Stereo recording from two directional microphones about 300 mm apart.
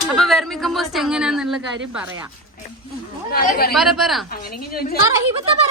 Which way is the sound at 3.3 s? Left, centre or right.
Left.